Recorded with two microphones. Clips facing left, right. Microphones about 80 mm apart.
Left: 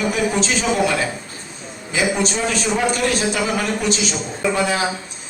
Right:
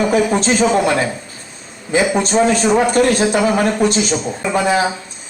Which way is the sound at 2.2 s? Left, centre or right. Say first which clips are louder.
Right 7 dB; right.